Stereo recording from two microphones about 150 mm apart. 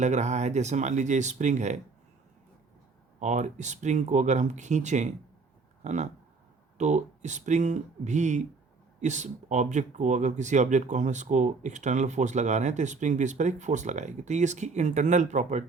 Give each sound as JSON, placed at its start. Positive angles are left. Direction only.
{"t": 0.0, "sound": "speech", "side_deg": -50}
{"t": 3.2, "sound": "speech", "side_deg": -55}